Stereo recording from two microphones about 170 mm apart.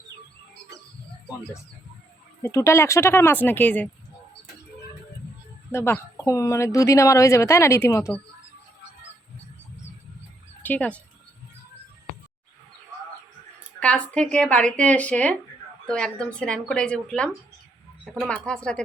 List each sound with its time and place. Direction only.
2.4 s speech: 20° left (ahead or behind)
5.7 s speech: 15° left (ahead or behind)
10.6 s speech: 10° left (ahead or behind)
13.7 s speech: 5° left (ahead or behind)